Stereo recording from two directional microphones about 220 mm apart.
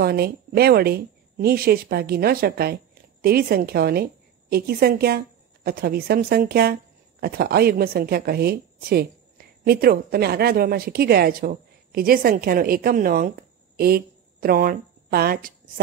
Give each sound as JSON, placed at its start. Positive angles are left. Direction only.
{"t": 0.0, "sound": "a woman's voice", "side_deg": -45}